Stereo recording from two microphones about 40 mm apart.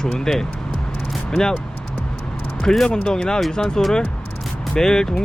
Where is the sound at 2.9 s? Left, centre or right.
Left.